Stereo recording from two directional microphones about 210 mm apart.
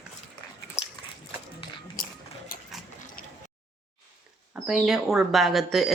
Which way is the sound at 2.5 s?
45° left (ahead or behind).